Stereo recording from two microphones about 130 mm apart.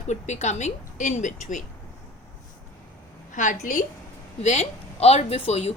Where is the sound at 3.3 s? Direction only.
80° left.